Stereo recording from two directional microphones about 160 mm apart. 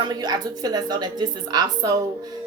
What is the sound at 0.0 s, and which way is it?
A woman's voice, 25° right (ahead or behind).